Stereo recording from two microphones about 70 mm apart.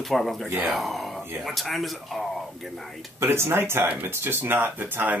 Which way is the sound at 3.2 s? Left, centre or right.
Right.